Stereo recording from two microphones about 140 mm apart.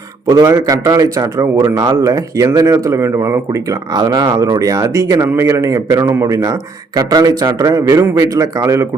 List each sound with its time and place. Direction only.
0.3 s speech: 25° right (ahead or behind)